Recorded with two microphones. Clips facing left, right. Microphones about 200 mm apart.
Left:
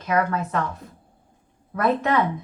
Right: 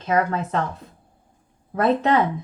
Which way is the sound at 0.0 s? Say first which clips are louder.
Right 1 dB; 25° right (ahead or behind).